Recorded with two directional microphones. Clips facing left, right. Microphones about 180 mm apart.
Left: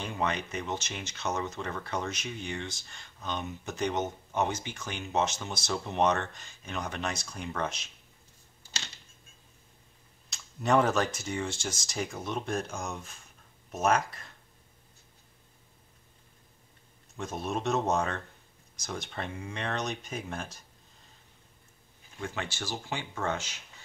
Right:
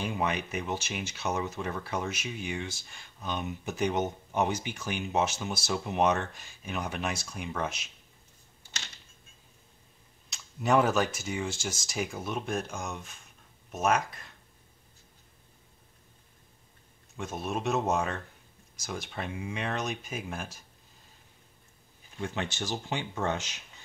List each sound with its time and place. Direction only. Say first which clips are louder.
0.0 s speech: right 1 dB; 10° right (ahead or behind)
10.3 s speech: even; 5° right (ahead or behind)
17.2 s speech: even; centre (ahead or behind)
22.2 s speech: right 3 dB; 20° right (ahead or behind)